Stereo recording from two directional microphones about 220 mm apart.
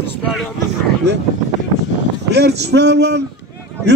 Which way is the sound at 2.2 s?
50° right (ahead or behind).